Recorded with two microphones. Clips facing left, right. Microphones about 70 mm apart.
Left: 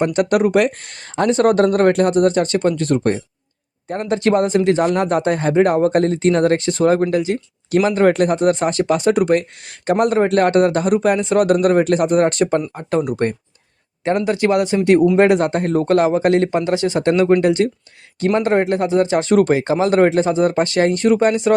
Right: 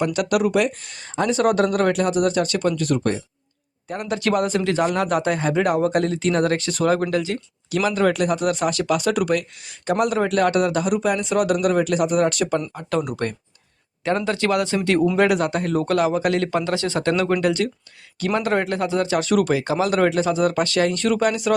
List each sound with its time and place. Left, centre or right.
0.0 s speech: left